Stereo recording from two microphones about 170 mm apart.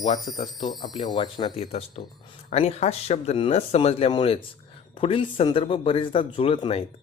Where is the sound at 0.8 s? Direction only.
25° left (ahead or behind).